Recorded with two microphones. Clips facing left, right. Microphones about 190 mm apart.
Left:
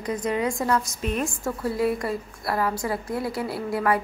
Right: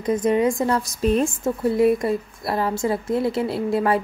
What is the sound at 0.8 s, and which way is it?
A woman's voice, 35° right (ahead or behind).